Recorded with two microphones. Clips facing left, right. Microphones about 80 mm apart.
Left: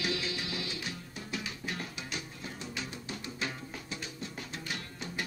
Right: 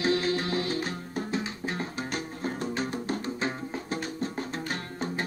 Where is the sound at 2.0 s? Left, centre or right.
Right.